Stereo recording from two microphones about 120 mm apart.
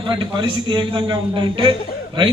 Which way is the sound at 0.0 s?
40° right (ahead or behind).